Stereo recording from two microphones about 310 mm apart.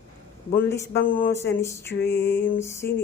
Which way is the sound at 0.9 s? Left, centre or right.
Left.